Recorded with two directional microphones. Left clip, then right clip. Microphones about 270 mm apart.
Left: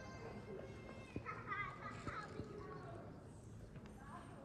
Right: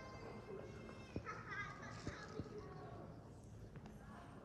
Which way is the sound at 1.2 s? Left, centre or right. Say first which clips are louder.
Left 3 dB; left.